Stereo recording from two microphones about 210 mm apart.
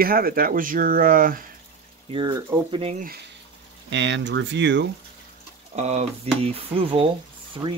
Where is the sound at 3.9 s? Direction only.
55° right (ahead or behind).